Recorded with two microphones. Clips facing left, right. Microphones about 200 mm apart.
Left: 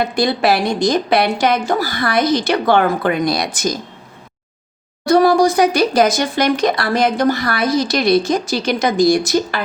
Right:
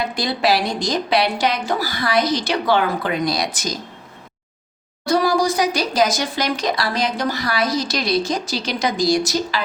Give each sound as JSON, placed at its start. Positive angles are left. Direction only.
{"t": 0.0, "sound": "a woman's voice", "side_deg": 55}
{"t": 5.0, "sound": "speech", "side_deg": 55}